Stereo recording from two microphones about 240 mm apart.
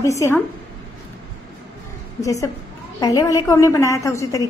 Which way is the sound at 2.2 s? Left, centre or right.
Centre.